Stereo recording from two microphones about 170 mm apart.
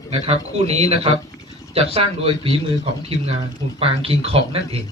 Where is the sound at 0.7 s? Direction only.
35° right (ahead or behind).